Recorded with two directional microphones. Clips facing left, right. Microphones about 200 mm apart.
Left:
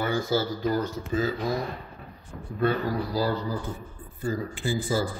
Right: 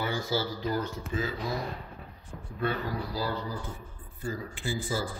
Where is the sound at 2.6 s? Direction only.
40° left (ahead or behind).